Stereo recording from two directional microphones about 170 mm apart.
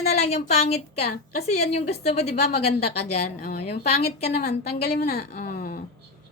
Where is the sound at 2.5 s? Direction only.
65° left (ahead or behind).